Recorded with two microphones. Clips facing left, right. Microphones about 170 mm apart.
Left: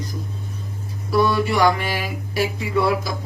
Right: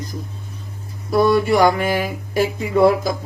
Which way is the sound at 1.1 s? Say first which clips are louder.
Right 4 dB; 50° right (ahead or behind).